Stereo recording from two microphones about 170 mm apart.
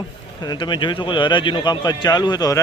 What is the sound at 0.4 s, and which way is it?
A man's voice, 25° left (ahead or behind).